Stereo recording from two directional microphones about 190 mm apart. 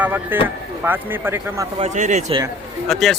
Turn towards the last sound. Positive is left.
turn(degrees=0)  # may be behind; listen again after turning